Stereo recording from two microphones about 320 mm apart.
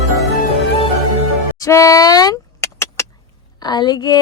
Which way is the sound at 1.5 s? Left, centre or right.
Centre.